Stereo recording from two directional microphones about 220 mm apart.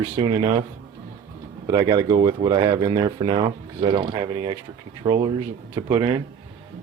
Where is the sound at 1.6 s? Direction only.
15° right (ahead or behind).